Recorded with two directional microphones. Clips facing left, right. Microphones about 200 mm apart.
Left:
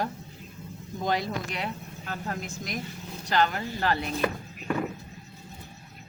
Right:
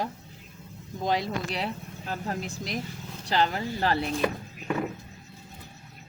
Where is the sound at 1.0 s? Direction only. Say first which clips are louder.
Right 1 dB; 25° right (ahead or behind).